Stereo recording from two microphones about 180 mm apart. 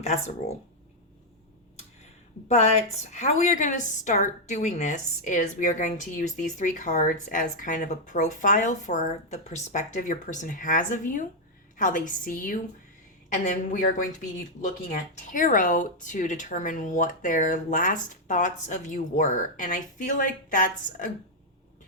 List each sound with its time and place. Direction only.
0.0 s speech: 40° left (ahead or behind)
2.5 s a woman's voice: 40° left (ahead or behind)